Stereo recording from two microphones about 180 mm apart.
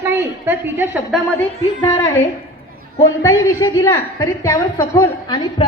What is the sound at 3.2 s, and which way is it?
A woman's voice, 15° left (ahead or behind).